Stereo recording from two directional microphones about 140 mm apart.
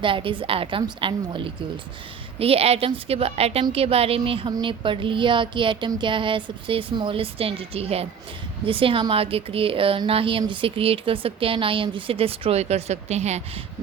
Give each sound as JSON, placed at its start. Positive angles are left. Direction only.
{"t": 0.0, "sound": "a woman's voice", "side_deg": -40}